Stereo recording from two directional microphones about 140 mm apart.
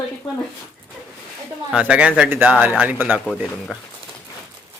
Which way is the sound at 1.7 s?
10° right (ahead or behind).